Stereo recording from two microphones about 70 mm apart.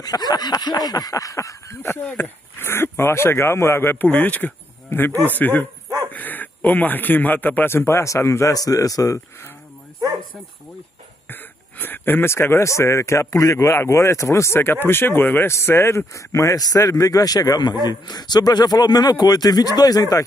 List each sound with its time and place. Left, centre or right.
0.0 s a man's voice: left
2.0 s a man's voice: left
5.1 s speech: right
5.4 s a man's voice: left
11.8 s a man's voice: left
17.8 s a man's voice: left